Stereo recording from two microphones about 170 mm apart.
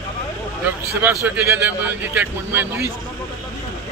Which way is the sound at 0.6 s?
10° right (ahead or behind).